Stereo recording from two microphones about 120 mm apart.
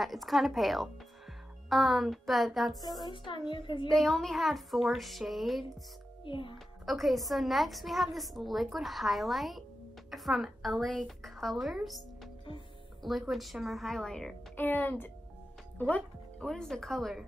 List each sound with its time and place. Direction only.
0.0 s a woman's voice: centre (ahead or behind)
3.0 s speech: 40° left (ahead or behind)
3.9 s a woman's voice: centre (ahead or behind)
6.2 s a child's voice: 45° left (ahead or behind)
6.9 s a woman's voice: centre (ahead or behind)
14.6 s speech: 15° left (ahead or behind)